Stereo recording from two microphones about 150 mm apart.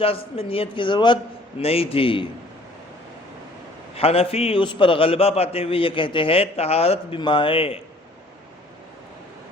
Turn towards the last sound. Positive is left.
turn(degrees=40)  # may be behind; listen again after turning